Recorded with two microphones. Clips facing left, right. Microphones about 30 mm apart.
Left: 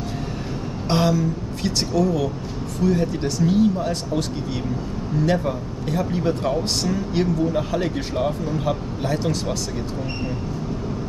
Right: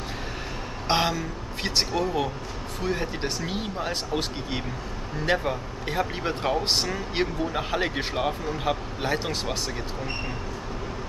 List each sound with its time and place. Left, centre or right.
0.8 s speech: right